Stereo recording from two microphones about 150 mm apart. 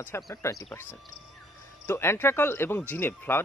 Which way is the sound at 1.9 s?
15° left (ahead or behind).